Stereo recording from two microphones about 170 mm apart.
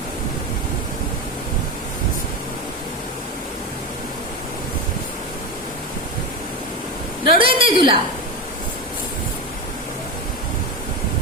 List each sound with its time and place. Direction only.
7.3 s a woman's voice: 30° right (ahead or behind)